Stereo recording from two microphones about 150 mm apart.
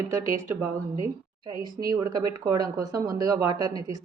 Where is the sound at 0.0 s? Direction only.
20° right (ahead or behind).